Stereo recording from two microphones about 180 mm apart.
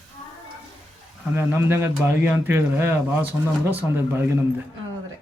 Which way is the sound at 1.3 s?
10° right (ahead or behind).